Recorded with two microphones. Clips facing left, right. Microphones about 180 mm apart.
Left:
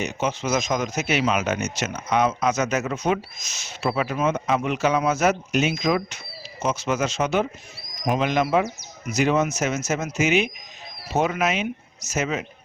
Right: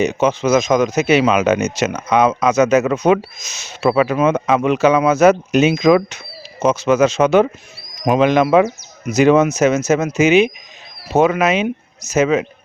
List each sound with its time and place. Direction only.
0.0 s speech: 90° right
10.2 s speech: 90° right